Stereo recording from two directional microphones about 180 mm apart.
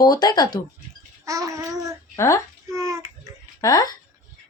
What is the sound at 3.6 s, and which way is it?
Speech, 20° left (ahead or behind).